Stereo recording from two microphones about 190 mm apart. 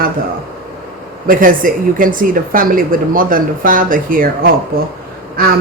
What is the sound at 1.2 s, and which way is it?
Speech, 45° right (ahead or behind).